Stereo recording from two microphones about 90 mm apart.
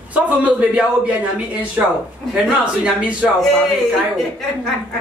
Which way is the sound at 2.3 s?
10° right (ahead or behind).